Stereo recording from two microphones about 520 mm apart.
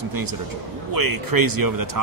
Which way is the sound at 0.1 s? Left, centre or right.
Right.